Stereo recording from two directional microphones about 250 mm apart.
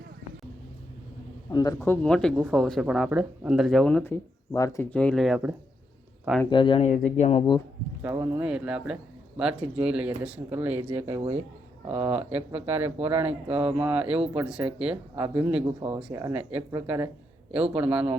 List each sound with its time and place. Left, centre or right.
1.5 s speech: centre
6.4 s speech: centre
8.0 s speech: centre
15.6 s speech: centre